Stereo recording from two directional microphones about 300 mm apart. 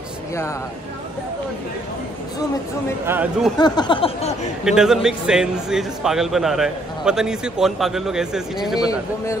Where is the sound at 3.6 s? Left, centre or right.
Centre.